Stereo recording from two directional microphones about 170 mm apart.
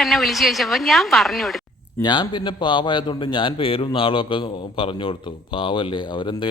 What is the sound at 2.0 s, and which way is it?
A man's voice, 25° left (ahead or behind).